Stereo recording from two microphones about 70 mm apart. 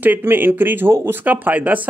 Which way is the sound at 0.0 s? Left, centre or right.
Right.